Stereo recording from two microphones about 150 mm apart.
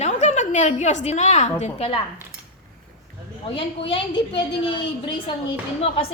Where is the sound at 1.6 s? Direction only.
40° left (ahead or behind).